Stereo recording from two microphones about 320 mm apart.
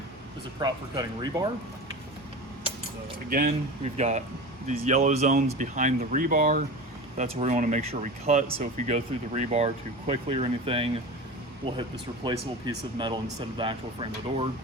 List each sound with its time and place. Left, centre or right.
0.6 s speech: centre
3.2 s speech: right